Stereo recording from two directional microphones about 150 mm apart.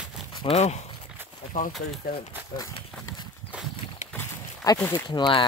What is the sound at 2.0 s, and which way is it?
Speech, 90° left.